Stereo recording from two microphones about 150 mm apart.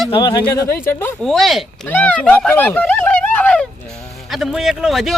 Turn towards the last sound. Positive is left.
turn(degrees=0)  # may be behind; listen again after turning